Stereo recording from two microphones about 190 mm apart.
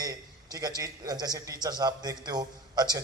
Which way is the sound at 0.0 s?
20° right (ahead or behind).